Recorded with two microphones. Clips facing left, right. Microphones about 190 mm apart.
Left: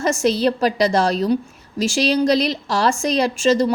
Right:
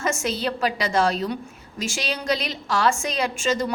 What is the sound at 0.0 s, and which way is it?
A woman's voice, 35° left (ahead or behind).